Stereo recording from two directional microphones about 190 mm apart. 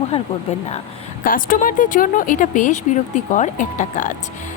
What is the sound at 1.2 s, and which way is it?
Speech, 45° left (ahead or behind).